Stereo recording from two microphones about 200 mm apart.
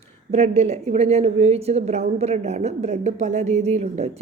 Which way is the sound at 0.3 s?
30° right (ahead or behind).